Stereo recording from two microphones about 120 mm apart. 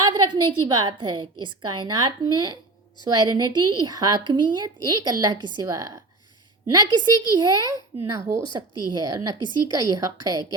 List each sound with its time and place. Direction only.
0.0 s a woman's voice: 35° right (ahead or behind)
8.1 s a woman's voice: 25° right (ahead or behind)